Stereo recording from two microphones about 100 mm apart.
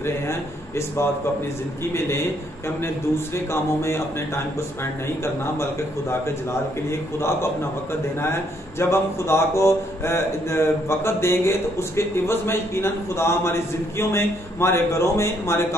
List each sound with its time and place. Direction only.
0.0 s speech: 25° left (ahead or behind)
5.2 s speech: 25° left (ahead or behind)